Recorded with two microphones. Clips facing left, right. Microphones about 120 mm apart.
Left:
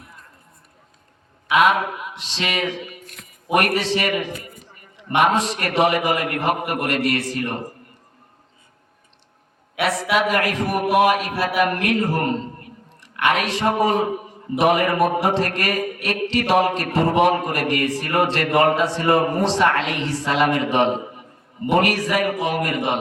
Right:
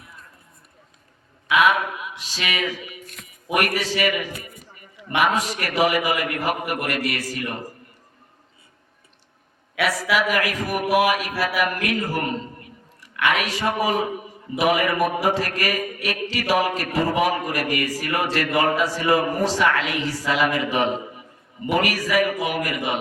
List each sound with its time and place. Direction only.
1.5 s a man's voice: 30° left (ahead or behind)
5.2 s a man's voice: 30° left (ahead or behind)
9.8 s a man's voice: 25° left (ahead or behind)